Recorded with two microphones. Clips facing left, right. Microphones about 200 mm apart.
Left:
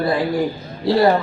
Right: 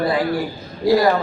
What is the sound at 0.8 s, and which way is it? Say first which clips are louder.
Speech: even; 30° left (ahead or behind).